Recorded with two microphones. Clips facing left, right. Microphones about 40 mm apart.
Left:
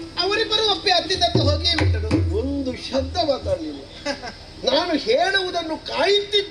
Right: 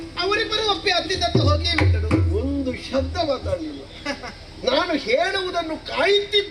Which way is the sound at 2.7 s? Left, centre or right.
Left.